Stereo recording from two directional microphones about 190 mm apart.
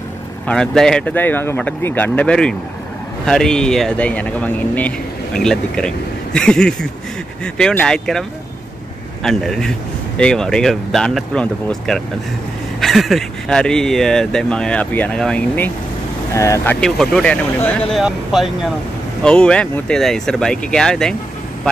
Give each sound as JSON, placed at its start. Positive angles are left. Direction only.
{"t": 0.5, "sound": "speech", "side_deg": 5}
{"t": 16.8, "sound": "speech", "side_deg": 5}